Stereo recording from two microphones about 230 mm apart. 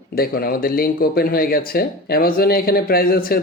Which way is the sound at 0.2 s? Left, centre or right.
Left.